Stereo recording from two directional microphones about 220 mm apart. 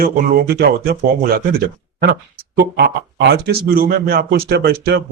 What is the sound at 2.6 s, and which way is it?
Speech, 50° right (ahead or behind).